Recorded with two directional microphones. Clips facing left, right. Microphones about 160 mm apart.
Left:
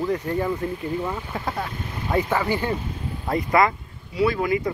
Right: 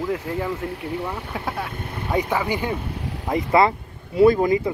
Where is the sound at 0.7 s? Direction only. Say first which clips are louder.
Left 1 dB; 75° right (ahead or behind).